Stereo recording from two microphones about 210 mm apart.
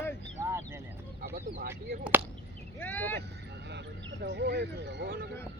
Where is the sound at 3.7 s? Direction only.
55° right (ahead or behind).